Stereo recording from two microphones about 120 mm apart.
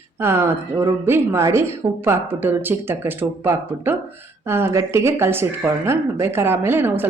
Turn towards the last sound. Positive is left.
turn(degrees=-20)  # may be behind; listen again after turning